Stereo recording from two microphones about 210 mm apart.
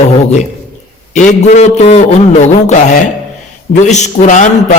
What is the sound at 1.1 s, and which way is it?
A man's voice, 35° left (ahead or behind).